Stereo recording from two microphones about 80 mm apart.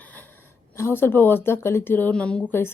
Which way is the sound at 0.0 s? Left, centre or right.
Centre.